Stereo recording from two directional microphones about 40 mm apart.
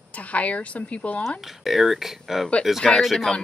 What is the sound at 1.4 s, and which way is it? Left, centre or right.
Speech, centre.